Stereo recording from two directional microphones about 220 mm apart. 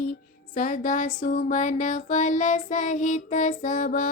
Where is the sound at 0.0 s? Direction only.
40° left (ahead or behind).